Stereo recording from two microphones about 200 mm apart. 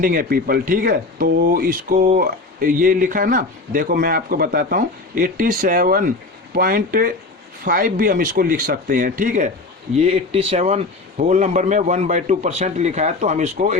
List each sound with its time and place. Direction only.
0.0 s a man's voice: 45° right (ahead or behind)